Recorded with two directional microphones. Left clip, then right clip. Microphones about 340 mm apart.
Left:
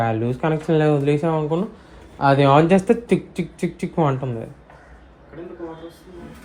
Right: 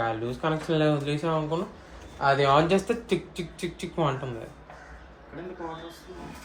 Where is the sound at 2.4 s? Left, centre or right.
Left.